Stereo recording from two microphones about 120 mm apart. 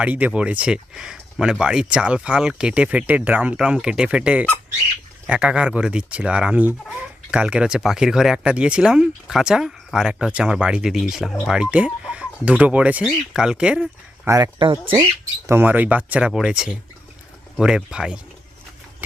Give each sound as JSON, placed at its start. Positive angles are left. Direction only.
{"t": 0.0, "sound": "speech", "side_deg": -10}
{"t": 14.3, "sound": "speech", "side_deg": -25}
{"t": 14.6, "sound": "speech", "side_deg": -45}
{"t": 15.4, "sound": "speech", "side_deg": -15}